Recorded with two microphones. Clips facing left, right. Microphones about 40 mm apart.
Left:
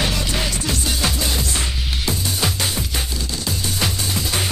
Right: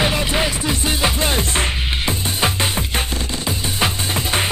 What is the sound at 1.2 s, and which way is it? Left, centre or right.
Music, right.